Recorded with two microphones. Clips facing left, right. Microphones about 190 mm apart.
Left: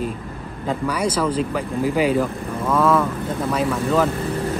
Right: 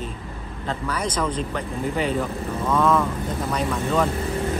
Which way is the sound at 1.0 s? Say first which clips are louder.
Left 4 dB; 10° left (ahead or behind).